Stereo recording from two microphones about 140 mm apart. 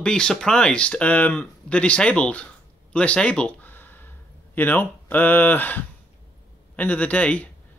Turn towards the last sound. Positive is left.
turn(degrees=10)  # may be behind; listen again after turning